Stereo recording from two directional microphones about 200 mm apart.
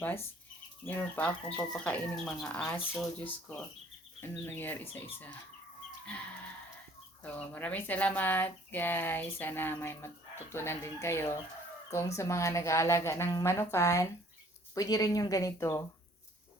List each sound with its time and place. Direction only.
0.9 s speech: 10° left (ahead or behind)
7.2 s speech: 10° left (ahead or behind)